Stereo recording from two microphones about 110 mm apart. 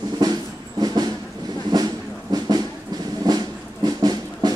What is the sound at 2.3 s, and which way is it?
Music, 35° right (ahead or behind).